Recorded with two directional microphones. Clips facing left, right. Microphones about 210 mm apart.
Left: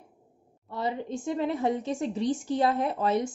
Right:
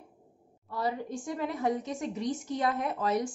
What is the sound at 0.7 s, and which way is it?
A woman's voice, 25° left (ahead or behind).